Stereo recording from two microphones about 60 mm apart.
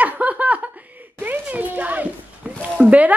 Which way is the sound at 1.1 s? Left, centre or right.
Right.